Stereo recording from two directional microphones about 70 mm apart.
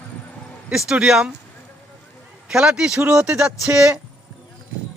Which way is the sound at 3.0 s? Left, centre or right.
Right.